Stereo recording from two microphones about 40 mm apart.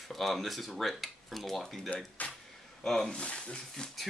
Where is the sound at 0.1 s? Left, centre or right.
Centre.